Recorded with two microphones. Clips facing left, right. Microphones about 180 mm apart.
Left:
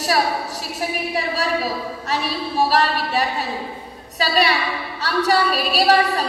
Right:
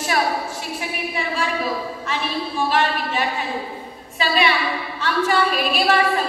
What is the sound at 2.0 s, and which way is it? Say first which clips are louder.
A woman's voice: left 2 dB; 40° left (ahead or behind).